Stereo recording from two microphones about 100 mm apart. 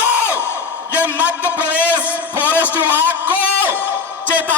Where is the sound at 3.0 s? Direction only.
15° right (ahead or behind).